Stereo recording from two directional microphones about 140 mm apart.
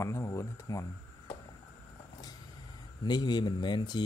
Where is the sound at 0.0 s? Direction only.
20° left (ahead or behind).